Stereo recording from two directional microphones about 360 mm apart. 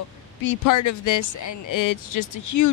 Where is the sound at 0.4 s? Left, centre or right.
Left.